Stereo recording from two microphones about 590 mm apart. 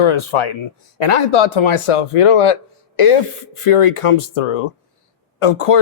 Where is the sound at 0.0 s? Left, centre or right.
Left.